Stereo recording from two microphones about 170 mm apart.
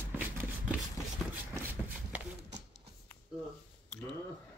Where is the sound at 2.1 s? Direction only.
5° right (ahead or behind).